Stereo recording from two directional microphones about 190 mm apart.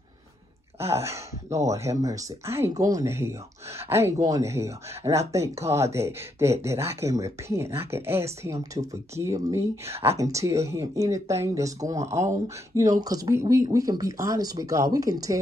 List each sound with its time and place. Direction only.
1.5 s speech: 15° right (ahead or behind)